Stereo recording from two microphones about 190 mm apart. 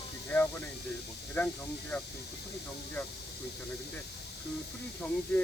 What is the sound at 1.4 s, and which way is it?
Speech, 10° left (ahead or behind).